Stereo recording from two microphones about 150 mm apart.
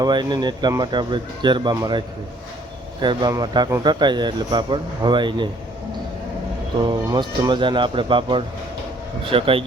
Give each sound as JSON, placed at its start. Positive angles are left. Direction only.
{"t": 0.0, "sound": "speech", "side_deg": -30}
{"t": 6.8, "sound": "speech", "side_deg": -30}